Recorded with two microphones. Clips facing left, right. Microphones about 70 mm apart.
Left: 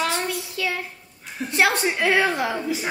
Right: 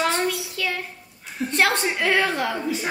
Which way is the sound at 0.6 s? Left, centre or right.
Centre.